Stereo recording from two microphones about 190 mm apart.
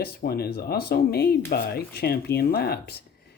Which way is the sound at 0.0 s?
55° left (ahead or behind).